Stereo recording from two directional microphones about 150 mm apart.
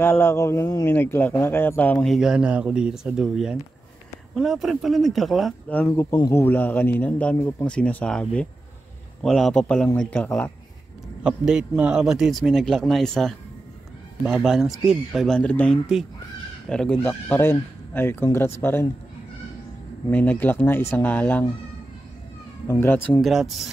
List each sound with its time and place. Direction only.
0.0 s speech: 15° left (ahead or behind)
2.0 s speech: 5° right (ahead or behind)
5.8 s speech: 15° left (ahead or behind)
11.2 s speech: 5° right (ahead or behind); by 18.9 s 15° left (ahead or behind)
20.1 s speech: 10° left (ahead or behind)
22.7 s speech: 15° left (ahead or behind)
23.2 s speech: centre (ahead or behind)